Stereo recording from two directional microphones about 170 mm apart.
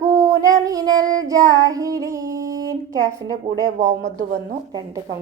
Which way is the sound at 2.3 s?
20° right (ahead or behind).